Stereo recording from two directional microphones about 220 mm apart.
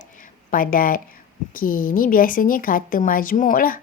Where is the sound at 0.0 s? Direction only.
40° left (ahead or behind).